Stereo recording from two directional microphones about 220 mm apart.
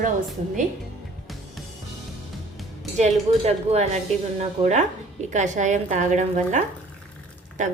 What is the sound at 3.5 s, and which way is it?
Speech, 30° right (ahead or behind).